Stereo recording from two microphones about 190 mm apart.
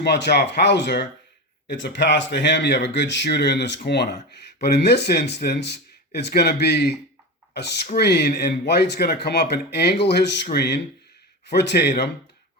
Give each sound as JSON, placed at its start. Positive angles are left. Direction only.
{"t": 0.0, "sound": "speech", "side_deg": 65}
{"t": 7.9, "sound": "speech", "side_deg": 60}